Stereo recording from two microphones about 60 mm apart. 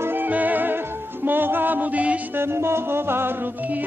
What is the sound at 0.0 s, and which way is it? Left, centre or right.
Music, right.